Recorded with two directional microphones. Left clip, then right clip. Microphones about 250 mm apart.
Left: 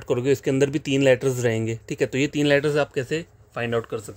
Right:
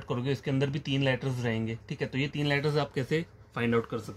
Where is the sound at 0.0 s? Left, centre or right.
Left.